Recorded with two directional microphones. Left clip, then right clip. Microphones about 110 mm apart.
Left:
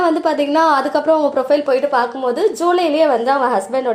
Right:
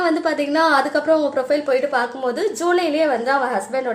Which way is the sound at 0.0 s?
15° left (ahead or behind).